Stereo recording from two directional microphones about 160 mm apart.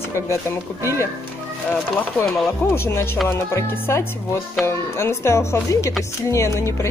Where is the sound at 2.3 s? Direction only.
15° left (ahead or behind).